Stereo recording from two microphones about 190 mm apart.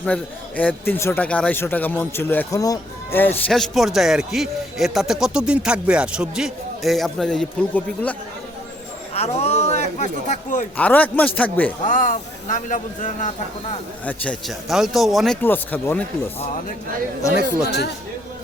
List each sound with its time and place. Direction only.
0.0 s speech: 10° left (ahead or behind)
9.1 s speech: 35° left (ahead or behind)
10.8 s speech: 5° left (ahead or behind)
11.9 s a man's voice: 45° left (ahead or behind)
14.0 s speech: 5° left (ahead or behind)
15.4 s speech: 10° left (ahead or behind)